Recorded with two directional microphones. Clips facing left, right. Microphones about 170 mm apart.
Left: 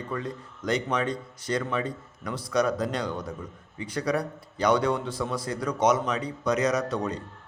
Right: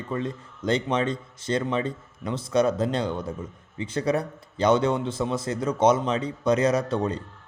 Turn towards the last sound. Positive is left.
turn(degrees=-30)  # may be behind; listen again after turning